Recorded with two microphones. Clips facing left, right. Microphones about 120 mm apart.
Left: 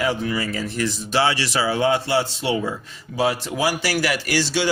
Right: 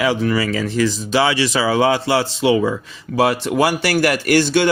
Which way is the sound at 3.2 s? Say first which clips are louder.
Right 5 dB; 65° right (ahead or behind).